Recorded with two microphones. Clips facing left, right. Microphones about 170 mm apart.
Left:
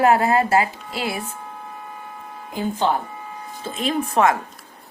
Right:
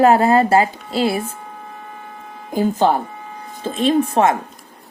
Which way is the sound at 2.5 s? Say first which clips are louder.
Right 6 dB; 45° right (ahead or behind).